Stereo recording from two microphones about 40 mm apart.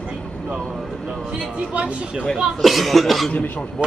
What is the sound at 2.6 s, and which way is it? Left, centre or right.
Speech, centre.